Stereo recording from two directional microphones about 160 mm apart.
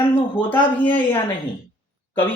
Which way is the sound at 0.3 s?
10° left (ahead or behind).